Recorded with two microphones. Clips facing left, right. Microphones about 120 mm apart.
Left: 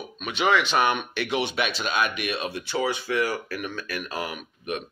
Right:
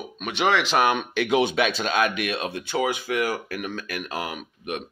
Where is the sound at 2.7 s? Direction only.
60° right (ahead or behind).